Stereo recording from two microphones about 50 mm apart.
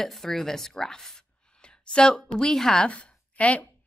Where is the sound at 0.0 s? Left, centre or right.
Centre.